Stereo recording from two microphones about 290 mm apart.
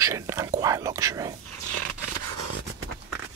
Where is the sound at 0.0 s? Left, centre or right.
Centre.